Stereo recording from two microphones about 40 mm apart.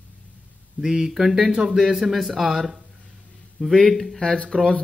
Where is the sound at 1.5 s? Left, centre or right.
Centre.